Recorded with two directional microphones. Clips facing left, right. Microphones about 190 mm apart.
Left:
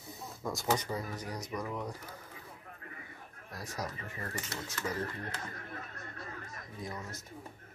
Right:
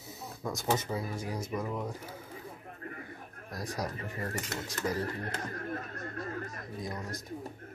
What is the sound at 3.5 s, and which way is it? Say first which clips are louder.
Music: right 6 dB; 40° right (ahead or behind).